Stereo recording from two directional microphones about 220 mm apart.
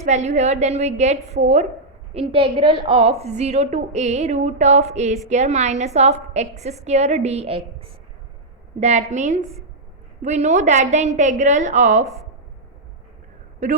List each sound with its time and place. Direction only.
0.0 s a woman's voice: 30° right (ahead or behind)